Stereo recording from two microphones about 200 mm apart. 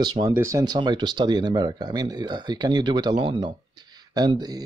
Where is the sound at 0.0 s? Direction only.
20° right (ahead or behind).